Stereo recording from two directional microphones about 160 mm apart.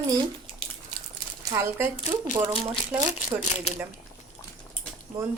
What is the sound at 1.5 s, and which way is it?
Speech, 15° right (ahead or behind).